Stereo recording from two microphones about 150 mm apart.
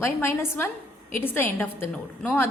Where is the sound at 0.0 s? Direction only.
15° left (ahead or behind).